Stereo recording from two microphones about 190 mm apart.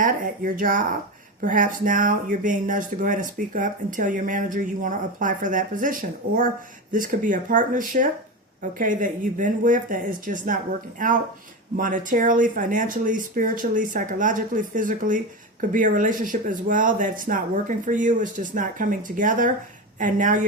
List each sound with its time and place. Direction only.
0.0 s speech: 45° right (ahead or behind)